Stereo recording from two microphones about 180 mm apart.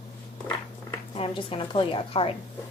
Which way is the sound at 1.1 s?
30° left (ahead or behind).